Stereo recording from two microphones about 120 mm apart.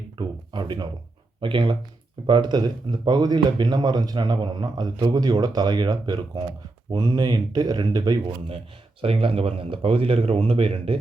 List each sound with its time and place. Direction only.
0.2 s a sound: 40° right (ahead or behind)
1.4 s speech: 45° right (ahead or behind)
9.0 s speech: 50° right (ahead or behind)